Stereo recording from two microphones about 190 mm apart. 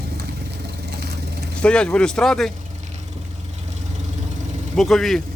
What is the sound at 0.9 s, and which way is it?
Vehicle, 60° right (ahead or behind).